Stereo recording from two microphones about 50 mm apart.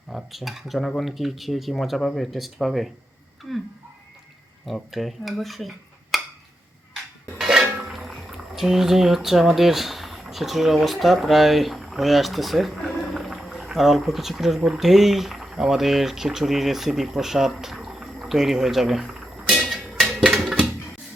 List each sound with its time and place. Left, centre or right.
0.1 s speech: centre
4.6 s speech: centre
7.8 s boiling: centre
9.6 s speech: centre
19.2 s a sound: centre
20.3 s a sound: centre